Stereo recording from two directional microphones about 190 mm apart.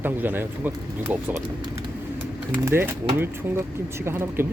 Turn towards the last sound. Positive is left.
turn(degrees=-10)  # may be behind; listen again after turning